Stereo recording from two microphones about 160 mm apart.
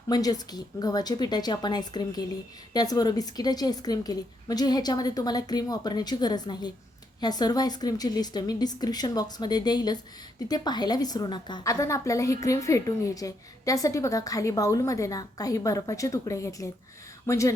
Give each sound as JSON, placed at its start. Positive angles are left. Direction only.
{"t": 0.1, "sound": "a woman's voice", "side_deg": 25}